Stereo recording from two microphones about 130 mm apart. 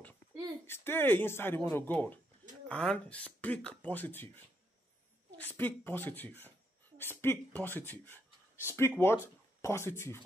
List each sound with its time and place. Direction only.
0.7 s speech: 15° left (ahead or behind)
5.4 s speech: 15° left (ahead or behind)